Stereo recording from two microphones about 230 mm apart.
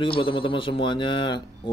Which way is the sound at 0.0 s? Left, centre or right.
Left.